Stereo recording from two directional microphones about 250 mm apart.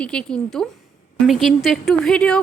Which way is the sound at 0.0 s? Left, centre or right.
Centre.